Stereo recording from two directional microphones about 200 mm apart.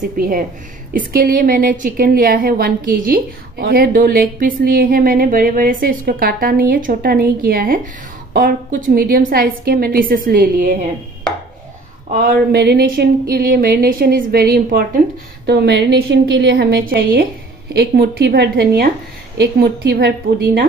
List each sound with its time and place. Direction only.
0.2 s a woman's voice: 45° right (ahead or behind)
12.5 s a woman's voice: 50° right (ahead or behind)